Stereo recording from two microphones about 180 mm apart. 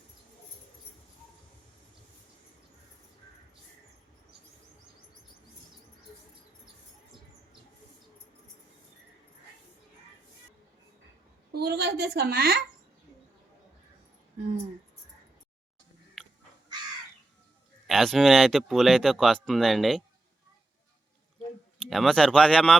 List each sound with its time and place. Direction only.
11.5 s a woman's voice: 65° right (ahead or behind)
17.8 s speech: centre (ahead or behind)
21.8 s speech: centre (ahead or behind)